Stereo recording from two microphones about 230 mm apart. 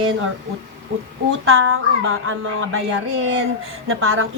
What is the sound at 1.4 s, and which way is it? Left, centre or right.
A woman's voice, right.